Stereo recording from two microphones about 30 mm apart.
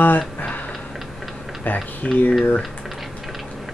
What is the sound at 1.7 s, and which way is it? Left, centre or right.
Speech, left.